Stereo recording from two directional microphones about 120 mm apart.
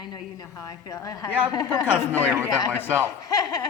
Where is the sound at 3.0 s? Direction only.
30° left (ahead or behind).